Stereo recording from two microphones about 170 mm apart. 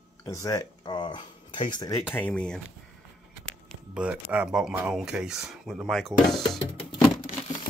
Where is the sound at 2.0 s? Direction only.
10° left (ahead or behind).